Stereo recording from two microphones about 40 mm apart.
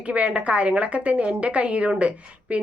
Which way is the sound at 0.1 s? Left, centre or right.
Right.